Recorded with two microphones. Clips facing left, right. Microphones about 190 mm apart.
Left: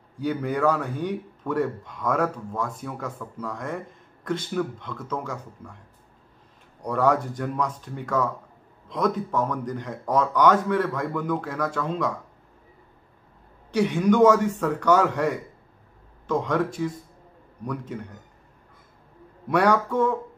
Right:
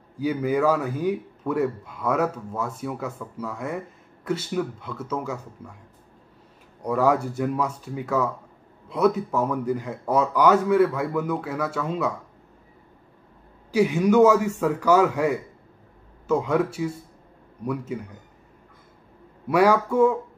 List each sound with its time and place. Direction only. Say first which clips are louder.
0.2 s a man's voice: right 2 dB; 5° right (ahead or behind)
6.8 s a man's voice: right 1 dB; 5° right (ahead or behind)
13.7 s a man's voice: right 1 dB; 5° right (ahead or behind)
19.4 s a man's voice: right 2 dB; 5° right (ahead or behind)